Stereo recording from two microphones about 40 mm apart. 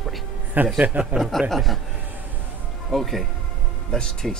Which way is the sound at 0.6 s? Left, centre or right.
Right.